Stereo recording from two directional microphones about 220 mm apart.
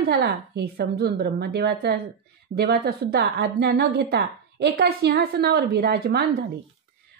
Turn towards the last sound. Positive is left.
turn(degrees=-45)  # may be behind; listen again after turning